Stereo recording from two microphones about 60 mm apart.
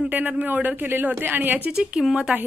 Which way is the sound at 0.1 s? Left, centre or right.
Right.